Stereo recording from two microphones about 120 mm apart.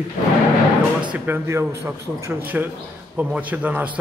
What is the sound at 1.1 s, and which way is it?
Speech, 15° right (ahead or behind).